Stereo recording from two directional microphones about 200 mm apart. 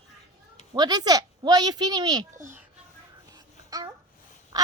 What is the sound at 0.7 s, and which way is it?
A child's voice, 20° right (ahead or behind).